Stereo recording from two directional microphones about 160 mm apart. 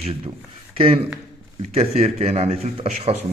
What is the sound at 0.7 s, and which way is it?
Speech, 35° right (ahead or behind).